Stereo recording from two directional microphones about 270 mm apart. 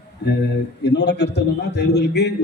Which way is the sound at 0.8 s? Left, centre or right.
Left.